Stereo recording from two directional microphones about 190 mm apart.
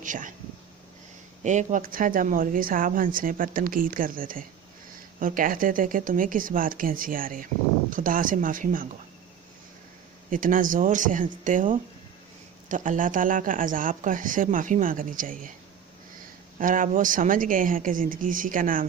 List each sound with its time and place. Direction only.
0.0 s speech: 45° right (ahead or behind)
1.5 s speech: 40° right (ahead or behind)
10.2 s speech: 45° right (ahead or behind)
16.6 s speech: 45° right (ahead or behind)